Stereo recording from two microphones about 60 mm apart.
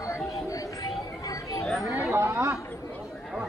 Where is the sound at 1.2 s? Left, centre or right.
Left.